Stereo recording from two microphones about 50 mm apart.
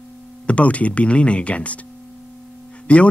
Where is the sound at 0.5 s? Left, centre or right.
Left.